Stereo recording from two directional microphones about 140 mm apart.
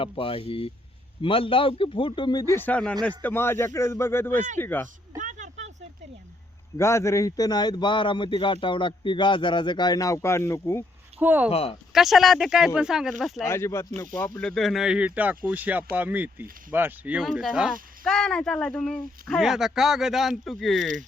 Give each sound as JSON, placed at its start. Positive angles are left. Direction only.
{"t": 0.0, "sound": "a man's voice", "side_deg": 40}
{"t": 2.6, "sound": "a man's voice", "side_deg": 10}
{"t": 5.1, "sound": "a sound", "side_deg": -60}
{"t": 6.7, "sound": "a man's voice", "side_deg": 20}
{"t": 11.2, "sound": "speech", "side_deg": -10}
{"t": 11.5, "sound": "speech", "side_deg": 45}
{"t": 11.9, "sound": "speech", "side_deg": 0}
{"t": 13.4, "sound": "a man's voice", "side_deg": 20}
{"t": 14.4, "sound": "speech", "side_deg": 0}